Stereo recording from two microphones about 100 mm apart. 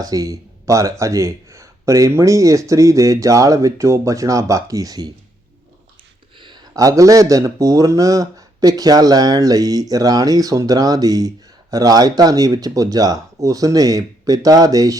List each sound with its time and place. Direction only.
0.0 s speech: 35° right (ahead or behind)
6.4 s a sound: 50° right (ahead or behind)
6.7 s speech: 35° right (ahead or behind)